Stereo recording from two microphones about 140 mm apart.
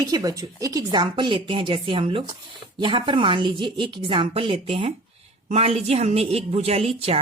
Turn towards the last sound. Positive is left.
turn(degrees=-45)  # may be behind; listen again after turning